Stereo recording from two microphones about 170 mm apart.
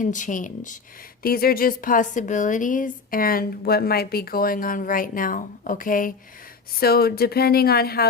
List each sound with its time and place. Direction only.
0.0 s speech: 50° left (ahead or behind)
1.2 s a woman's voice: 60° left (ahead or behind)